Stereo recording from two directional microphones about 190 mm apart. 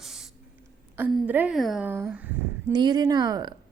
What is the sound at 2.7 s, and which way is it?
Speech, 20° right (ahead or behind).